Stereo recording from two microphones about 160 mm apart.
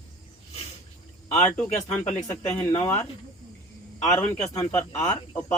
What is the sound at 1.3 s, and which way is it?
Speech, 10° left (ahead or behind).